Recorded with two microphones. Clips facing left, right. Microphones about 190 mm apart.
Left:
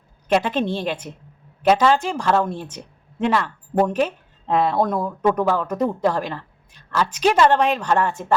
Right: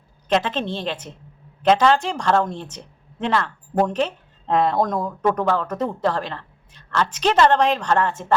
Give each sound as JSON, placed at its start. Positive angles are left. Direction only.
{"t": 0.3, "sound": "speech", "side_deg": 10}